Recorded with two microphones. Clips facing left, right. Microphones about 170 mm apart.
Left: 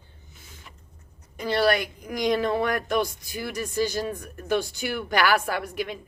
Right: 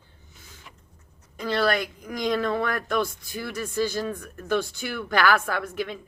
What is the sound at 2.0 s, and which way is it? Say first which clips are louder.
A woman's voice: left 2 dB; 20° left (ahead or behind).